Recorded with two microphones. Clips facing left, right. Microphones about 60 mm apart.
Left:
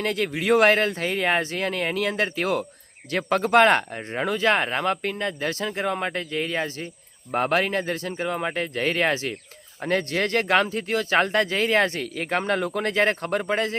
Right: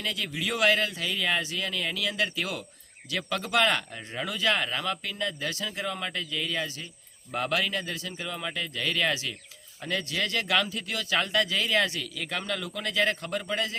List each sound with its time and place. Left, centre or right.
0.0 s speech: left